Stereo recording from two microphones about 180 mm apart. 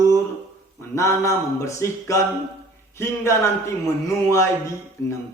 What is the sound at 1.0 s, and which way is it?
Speech, 15° left (ahead or behind).